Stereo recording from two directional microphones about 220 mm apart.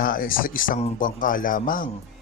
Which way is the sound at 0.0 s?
40° left (ahead or behind).